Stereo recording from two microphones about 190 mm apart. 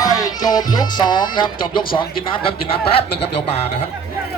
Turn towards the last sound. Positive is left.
turn(degrees=30)  # may be behind; listen again after turning